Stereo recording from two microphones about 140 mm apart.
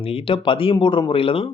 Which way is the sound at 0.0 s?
40° left (ahead or behind).